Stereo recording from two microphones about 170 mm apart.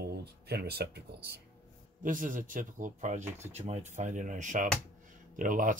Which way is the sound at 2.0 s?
50° right (ahead or behind).